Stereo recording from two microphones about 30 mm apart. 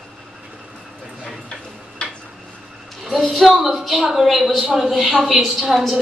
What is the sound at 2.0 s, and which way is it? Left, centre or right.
Tick-tock, left.